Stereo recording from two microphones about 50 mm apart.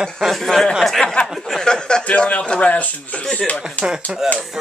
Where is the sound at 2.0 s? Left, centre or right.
Left.